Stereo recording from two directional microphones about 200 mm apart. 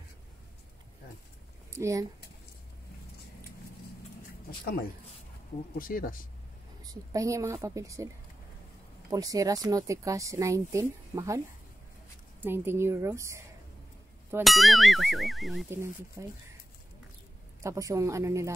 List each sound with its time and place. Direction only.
1.8 s speech: 15° right (ahead or behind)
4.5 s speech: 50° left (ahead or behind)
6.8 s speech: 20° right (ahead or behind)
9.1 s speech: 15° right (ahead or behind)
14.4 s speech: centre (ahead or behind)
15.7 s speech: 15° right (ahead or behind)
17.6 s speech: 15° right (ahead or behind)